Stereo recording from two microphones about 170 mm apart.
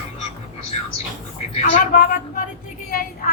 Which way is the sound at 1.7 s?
55° left (ahead or behind).